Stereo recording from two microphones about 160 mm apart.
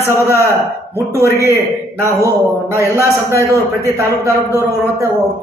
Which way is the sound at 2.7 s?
15° right (ahead or behind).